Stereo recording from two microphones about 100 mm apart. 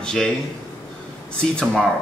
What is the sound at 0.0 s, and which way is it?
Speech, 5° left (ahead or behind).